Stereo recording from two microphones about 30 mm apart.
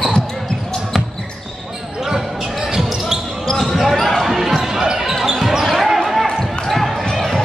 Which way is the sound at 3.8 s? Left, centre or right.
Centre.